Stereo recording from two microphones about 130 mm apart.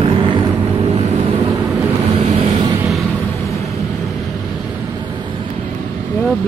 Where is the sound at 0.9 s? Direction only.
55° right (ahead or behind).